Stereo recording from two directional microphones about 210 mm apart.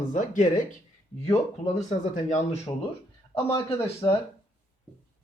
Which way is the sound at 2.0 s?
35° left (ahead or behind).